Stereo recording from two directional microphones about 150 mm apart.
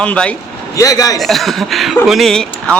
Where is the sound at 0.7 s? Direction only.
20° left (ahead or behind).